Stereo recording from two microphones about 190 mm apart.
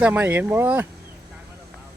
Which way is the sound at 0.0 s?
10° right (ahead or behind).